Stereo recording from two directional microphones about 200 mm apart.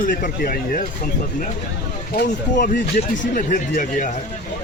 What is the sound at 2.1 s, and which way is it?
Speech, 40° left (ahead or behind).